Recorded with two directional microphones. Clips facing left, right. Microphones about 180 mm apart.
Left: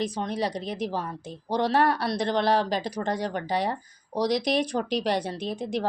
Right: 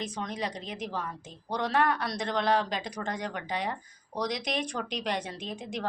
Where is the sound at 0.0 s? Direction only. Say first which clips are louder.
Left 6 dB; 35° left (ahead or behind).